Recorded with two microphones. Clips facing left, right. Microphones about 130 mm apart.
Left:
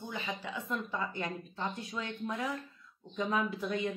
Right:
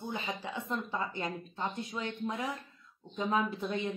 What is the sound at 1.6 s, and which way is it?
Speech, 25° right (ahead or behind).